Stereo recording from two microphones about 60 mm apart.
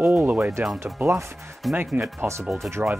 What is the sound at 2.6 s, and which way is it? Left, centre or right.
Speech, right.